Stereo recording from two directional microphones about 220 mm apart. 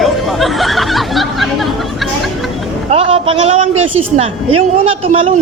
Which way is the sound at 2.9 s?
25° right (ahead or behind).